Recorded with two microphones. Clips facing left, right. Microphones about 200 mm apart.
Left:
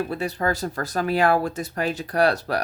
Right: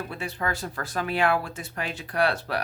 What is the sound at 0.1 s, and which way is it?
Speech, 40° left (ahead or behind).